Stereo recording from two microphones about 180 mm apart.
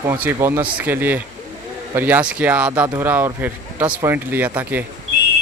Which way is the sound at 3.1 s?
10° right (ahead or behind).